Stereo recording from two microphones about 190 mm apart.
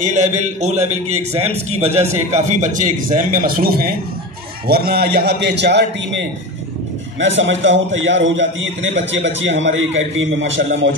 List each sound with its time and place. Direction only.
0.0 s a man's voice: 40° right (ahead or behind); by 6.2 s 65° right (ahead or behind)
7.2 s a man's voice: 75° right (ahead or behind)